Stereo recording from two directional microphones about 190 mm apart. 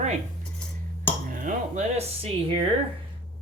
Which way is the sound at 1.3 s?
45° right (ahead or behind).